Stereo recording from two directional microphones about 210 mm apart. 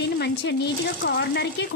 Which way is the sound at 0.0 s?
55° left (ahead or behind).